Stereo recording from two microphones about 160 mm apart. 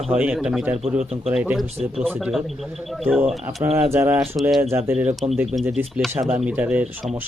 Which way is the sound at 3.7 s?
15° right (ahead or behind).